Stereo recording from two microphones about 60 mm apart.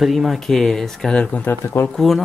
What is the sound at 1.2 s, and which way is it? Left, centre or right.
Speech, left.